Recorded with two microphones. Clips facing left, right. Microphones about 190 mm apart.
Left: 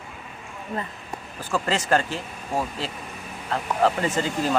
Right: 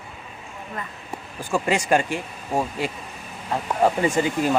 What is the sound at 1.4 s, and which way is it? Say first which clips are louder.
Speech: right 3 dB; 15° right (ahead or behind).